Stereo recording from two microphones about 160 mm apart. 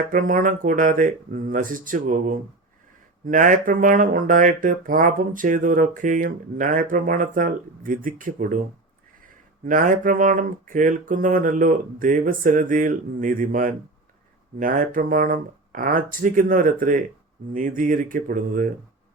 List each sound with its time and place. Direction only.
0.1 s speech: 55° right (ahead or behind)